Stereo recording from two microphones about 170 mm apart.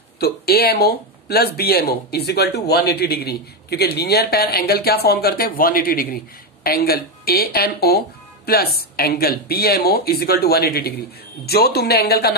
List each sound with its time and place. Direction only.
0.2 s speech: 65° left (ahead or behind)